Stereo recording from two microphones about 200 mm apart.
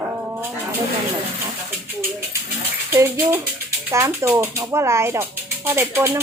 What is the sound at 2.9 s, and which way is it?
Speech, 10° right (ahead or behind).